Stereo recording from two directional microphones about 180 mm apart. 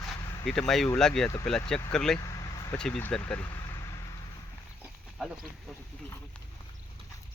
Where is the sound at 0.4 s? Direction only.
Centre (ahead or behind).